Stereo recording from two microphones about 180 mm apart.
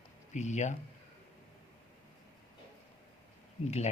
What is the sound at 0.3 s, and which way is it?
Speech, 40° left (ahead or behind).